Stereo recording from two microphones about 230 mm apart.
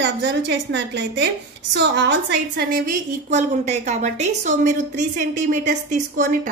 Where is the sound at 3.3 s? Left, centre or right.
Right.